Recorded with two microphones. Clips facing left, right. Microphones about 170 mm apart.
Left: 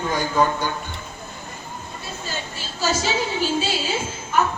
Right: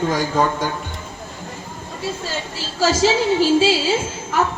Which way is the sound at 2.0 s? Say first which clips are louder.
Right 7 dB; 90° right.